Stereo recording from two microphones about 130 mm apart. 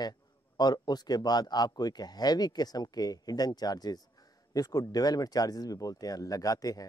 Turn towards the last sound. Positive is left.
turn(degrees=30)  # may be behind; listen again after turning